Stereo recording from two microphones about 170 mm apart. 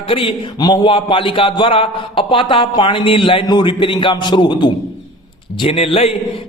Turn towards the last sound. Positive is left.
turn(degrees=35)  # may be behind; listen again after turning